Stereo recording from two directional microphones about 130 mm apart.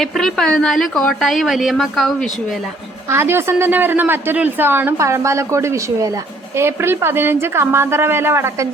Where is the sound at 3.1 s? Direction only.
20° right (ahead or behind).